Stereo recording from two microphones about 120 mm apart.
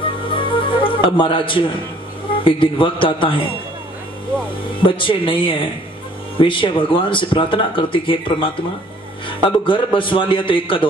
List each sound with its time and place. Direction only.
0.0 s music: 45° left (ahead or behind)
2.4 s speech: 45° left (ahead or behind)
4.8 s speech: 45° left (ahead or behind)